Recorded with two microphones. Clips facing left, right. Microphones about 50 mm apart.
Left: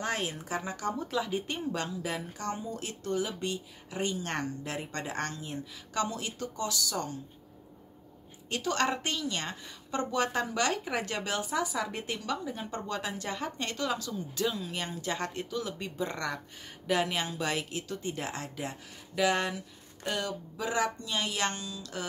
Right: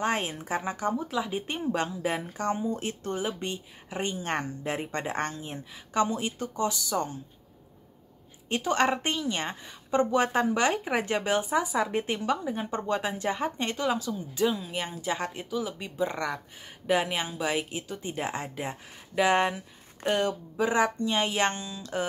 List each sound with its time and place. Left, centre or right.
0.0 s a woman's voice: right
0.9 s speech: centre
1.3 s a woman's voice: right
8.5 s a woman's voice: right